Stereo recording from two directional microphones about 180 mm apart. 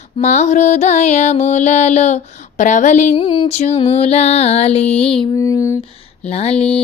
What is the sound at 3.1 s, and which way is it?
Mantra, 25° left (ahead or behind).